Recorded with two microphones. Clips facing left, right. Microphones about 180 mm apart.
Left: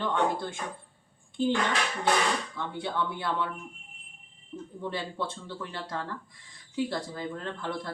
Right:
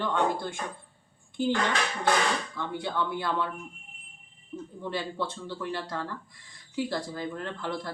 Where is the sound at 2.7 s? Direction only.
25° left (ahead or behind).